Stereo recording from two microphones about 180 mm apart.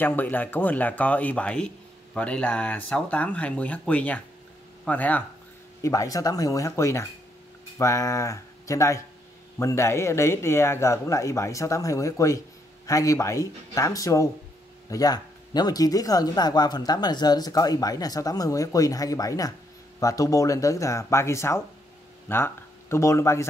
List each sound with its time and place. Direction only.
0.0 s speech: 10° left (ahead or behind)